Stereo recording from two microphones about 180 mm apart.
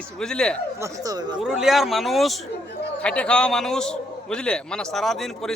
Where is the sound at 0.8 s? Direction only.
20° right (ahead or behind).